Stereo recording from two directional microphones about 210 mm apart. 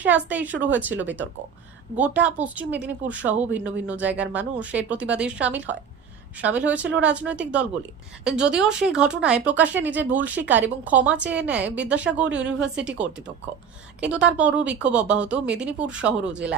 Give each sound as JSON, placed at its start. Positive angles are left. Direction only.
{"t": 0.0, "sound": "speech", "side_deg": -5}